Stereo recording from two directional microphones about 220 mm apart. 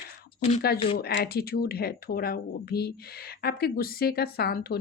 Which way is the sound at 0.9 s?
45° left (ahead or behind).